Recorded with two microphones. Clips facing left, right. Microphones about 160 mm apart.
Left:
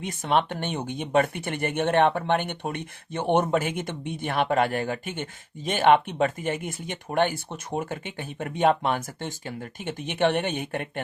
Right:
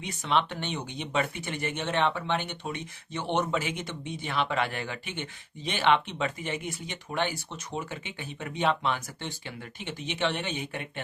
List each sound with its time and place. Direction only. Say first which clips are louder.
0.0 s speech: left 4 dB; 50° left (ahead or behind)